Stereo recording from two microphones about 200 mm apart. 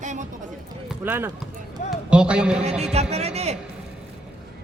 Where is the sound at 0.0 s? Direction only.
35° right (ahead or behind).